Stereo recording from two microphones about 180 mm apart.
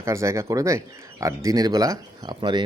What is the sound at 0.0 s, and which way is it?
Speech, 15° right (ahead or behind).